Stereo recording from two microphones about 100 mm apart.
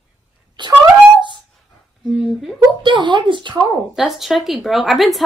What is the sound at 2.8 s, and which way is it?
Speech, 50° right (ahead or behind).